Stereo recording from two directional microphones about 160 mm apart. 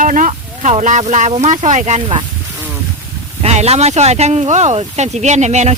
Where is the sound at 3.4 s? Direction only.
40° right (ahead or behind).